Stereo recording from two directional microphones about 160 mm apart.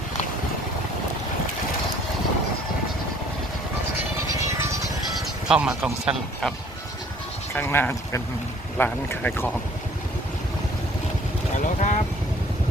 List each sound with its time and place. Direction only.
5.5 s speech: 5° right (ahead or behind)
7.5 s speech: 15° left (ahead or behind)
11.5 s vehicle: 50° left (ahead or behind)